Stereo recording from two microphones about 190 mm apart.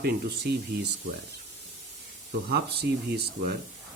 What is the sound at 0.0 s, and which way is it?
Speech, 60° right (ahead or behind).